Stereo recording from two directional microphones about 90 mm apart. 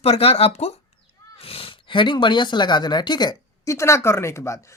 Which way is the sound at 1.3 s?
90° left.